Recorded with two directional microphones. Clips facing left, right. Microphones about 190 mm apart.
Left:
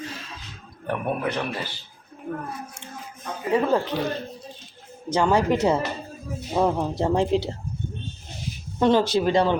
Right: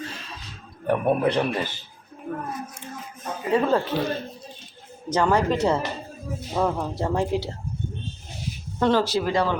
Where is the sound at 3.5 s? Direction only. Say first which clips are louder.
Even; 10° left (ahead or behind).